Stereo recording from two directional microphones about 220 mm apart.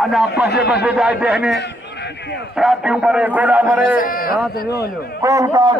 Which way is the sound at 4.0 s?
40° left (ahead or behind).